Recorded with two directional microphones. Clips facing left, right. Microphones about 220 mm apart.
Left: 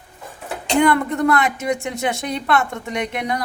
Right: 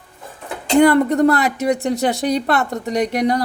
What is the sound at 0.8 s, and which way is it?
A woman's voice, 35° right (ahead or behind).